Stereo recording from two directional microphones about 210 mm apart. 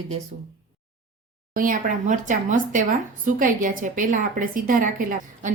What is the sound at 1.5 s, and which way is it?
A woman's voice, 40° right (ahead or behind).